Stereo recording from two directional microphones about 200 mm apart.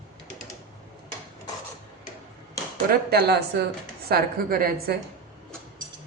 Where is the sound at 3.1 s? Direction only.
50° right (ahead or behind).